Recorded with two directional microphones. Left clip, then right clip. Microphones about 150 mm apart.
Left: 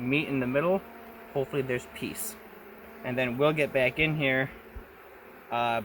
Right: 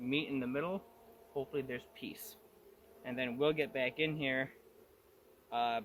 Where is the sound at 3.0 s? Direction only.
65° left (ahead or behind).